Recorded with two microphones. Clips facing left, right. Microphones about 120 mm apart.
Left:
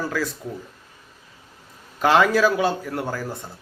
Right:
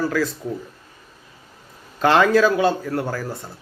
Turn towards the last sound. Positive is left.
turn(degrees=15)  # may be behind; listen again after turning